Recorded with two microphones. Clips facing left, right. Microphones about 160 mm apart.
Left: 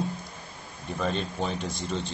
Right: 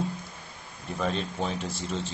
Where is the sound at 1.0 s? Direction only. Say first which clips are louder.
Even; centre (ahead or behind).